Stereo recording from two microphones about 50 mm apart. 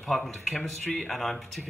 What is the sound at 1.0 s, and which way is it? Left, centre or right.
Speech, centre.